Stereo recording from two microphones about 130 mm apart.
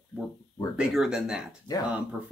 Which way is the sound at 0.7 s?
5° right (ahead or behind).